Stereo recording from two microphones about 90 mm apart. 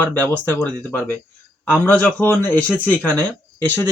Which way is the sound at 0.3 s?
25° left (ahead or behind).